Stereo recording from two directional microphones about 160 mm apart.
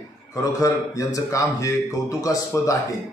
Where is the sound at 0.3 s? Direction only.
20° left (ahead or behind).